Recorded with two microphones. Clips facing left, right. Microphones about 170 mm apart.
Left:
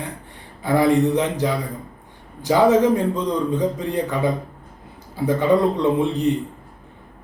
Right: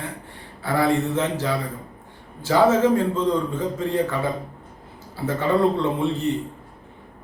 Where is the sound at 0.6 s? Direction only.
15° left (ahead or behind).